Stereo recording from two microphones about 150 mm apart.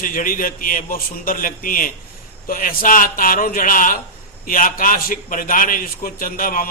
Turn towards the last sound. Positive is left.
turn(degrees=65)  # may be behind; listen again after turning